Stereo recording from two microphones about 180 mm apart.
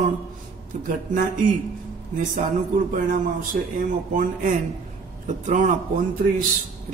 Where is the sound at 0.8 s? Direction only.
50° right (ahead or behind).